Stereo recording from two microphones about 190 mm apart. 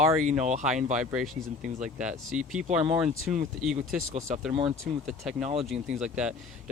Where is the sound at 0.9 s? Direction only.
5° right (ahead or behind).